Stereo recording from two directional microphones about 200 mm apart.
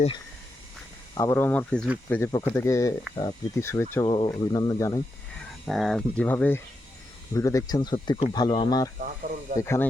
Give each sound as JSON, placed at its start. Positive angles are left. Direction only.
{"t": 1.1, "sound": "speech", "side_deg": 15}
{"t": 5.4, "sound": "speech", "side_deg": 0}
{"t": 9.0, "sound": "speech", "side_deg": -40}
{"t": 9.6, "sound": "speech", "side_deg": 15}